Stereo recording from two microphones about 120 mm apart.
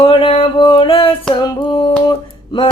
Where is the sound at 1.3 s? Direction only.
35° left (ahead or behind).